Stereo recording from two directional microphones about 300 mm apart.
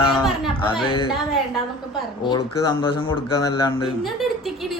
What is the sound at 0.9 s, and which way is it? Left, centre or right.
Speech, centre.